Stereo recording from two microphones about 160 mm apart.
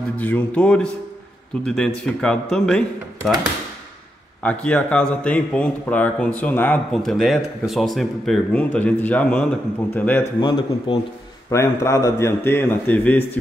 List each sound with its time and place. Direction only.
0.2 s a man's voice: 10° left (ahead or behind)
4.4 s speech: 10° left (ahead or behind)
10.4 s speech: 30° left (ahead or behind)
11.5 s speech: 20° left (ahead or behind)